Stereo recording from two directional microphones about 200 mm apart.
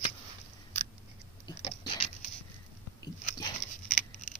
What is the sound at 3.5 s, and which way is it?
Patter, 40° left (ahead or behind).